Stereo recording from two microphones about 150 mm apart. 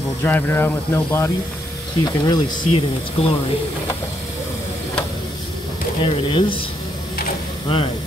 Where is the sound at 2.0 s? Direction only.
25° left (ahead or behind).